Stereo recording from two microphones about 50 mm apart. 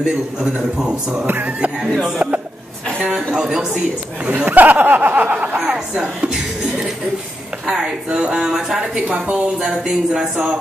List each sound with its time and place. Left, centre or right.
0.0 s a woman's voice: centre
1.2 s speech: right
1.8 s a woman's voice: centre
4.5 s speech: right
5.7 s a woman's voice: centre
9.7 s a woman's voice: centre
10.3 s speech: right